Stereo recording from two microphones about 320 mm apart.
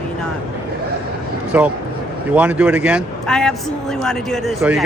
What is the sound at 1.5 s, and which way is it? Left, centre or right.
A man's voice, centre.